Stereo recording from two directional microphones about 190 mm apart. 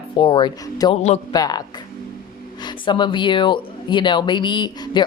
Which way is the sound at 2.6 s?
25° left (ahead or behind).